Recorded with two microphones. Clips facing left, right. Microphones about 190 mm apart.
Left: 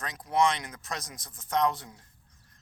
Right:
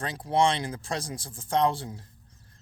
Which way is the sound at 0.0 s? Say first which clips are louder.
Right 2 dB; 30° right (ahead or behind).